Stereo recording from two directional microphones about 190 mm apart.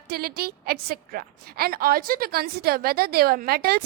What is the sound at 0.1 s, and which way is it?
A woman's voice, 55° right (ahead or behind).